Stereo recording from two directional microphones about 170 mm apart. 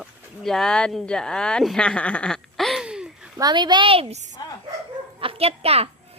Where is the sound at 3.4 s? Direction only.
25° right (ahead or behind).